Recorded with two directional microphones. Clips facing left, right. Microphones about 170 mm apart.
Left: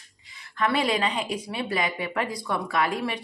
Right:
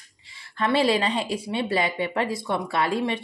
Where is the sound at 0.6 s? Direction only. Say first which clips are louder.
Right 3 dB; 30° right (ahead or behind).